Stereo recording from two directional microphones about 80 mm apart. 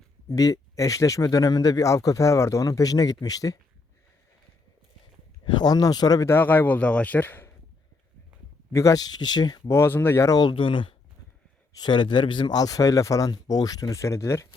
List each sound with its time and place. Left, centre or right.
0.3 s speech: left
5.5 s speech: left
6.2 s a man's voice: left
8.7 s speech: left
9.6 s speech: left
10.2 s speech: left
10.6 s speech: left
11.7 s speech: left
12.5 s speech: left